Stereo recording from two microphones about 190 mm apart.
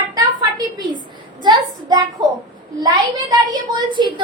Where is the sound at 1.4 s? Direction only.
20° right (ahead or behind).